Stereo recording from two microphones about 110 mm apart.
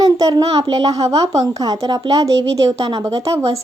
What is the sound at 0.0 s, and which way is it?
A woman's voice, 35° right (ahead or behind).